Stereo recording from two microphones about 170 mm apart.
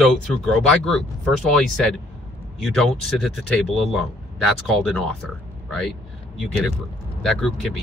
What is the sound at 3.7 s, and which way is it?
Speech, centre (ahead or behind).